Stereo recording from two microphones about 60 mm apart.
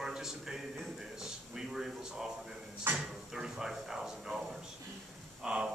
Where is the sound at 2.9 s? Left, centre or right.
Right.